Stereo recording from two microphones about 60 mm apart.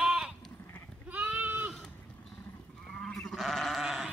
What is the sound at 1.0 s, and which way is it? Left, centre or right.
Goat, right.